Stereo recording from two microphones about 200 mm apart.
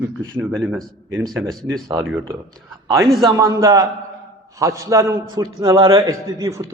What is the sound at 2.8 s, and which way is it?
A man's voice, 20° right (ahead or behind).